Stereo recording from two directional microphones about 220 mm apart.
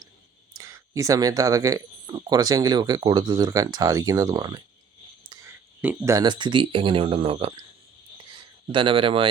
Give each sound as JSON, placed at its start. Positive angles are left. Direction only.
{"t": 0.5, "sound": "speech", "side_deg": -15}
{"t": 8.7, "sound": "speech", "side_deg": -20}